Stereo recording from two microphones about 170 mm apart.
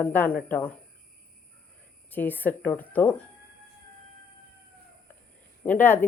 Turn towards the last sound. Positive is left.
turn(degrees=10)  # may be behind; listen again after turning